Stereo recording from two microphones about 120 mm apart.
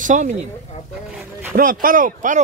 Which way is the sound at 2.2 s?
90° right.